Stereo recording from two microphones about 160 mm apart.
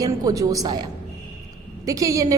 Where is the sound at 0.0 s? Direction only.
20° right (ahead or behind).